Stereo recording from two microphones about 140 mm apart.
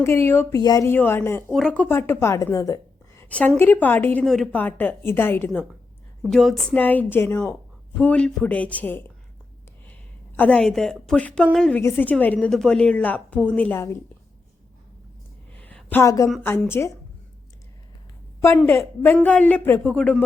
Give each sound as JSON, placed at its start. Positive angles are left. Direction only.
{"t": 0.0, "sound": "a woman's voice", "side_deg": 20}
{"t": 0.6, "sound": "a woman's voice", "side_deg": 30}
{"t": 0.9, "sound": "a woman's voice", "side_deg": 15}
{"t": 1.5, "sound": "a woman's voice", "side_deg": 5}
{"t": 3.2, "sound": "a sound", "side_deg": 10}
{"t": 3.6, "sound": "a woman's voice", "side_deg": 15}
{"t": 6.3, "sound": "a woman's voice", "side_deg": 0}
{"t": 6.7, "sound": "a woman's voice", "side_deg": 10}
{"t": 10.3, "sound": "a woman's voice", "side_deg": 10}
{"t": 11.8, "sound": "a woman's voice", "side_deg": 15}
{"t": 15.5, "sound": "a sound", "side_deg": 10}
{"t": 16.4, "sound": "a woman's voice", "side_deg": 15}
{"t": 18.3, "sound": "a woman's voice", "side_deg": 15}